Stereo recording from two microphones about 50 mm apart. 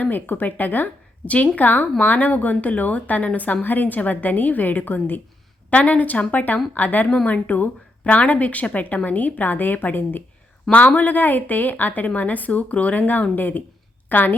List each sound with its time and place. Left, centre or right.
0.0 s a woman's voice: left